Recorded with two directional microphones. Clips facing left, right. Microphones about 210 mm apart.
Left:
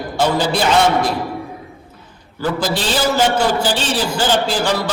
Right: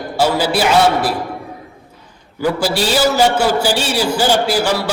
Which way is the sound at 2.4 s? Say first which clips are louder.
Right 3 dB; 10° right (ahead or behind).